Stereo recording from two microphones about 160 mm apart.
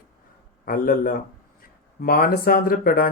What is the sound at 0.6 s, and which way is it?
Speech, 60° left (ahead or behind).